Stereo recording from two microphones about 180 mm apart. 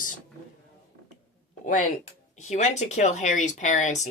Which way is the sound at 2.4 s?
40° left (ahead or behind).